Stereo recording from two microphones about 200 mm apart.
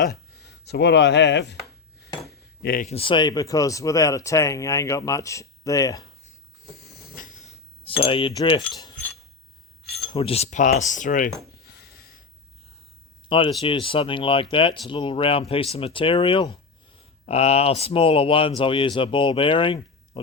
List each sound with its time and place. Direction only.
0.0 s speech: 55° left (ahead or behind)
2.6 s speech: 50° left (ahead or behind)
2.8 s speech: 30° left (ahead or behind)
7.2 s a sound: 40° left (ahead or behind)
8.7 s keys jangling: 15° left (ahead or behind)
10.0 s speech: 25° left (ahead or behind)
11.6 s a sound: 50° left (ahead or behind)
13.2 s speech: 25° left (ahead or behind)